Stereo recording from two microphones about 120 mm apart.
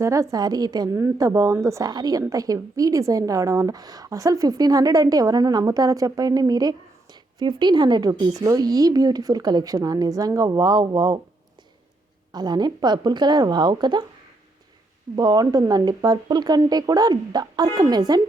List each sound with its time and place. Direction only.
0.0 s a woman's voice: 25° right (ahead or behind)
12.3 s a woman's voice: 35° right (ahead or behind)
15.1 s a woman's voice: 35° right (ahead or behind)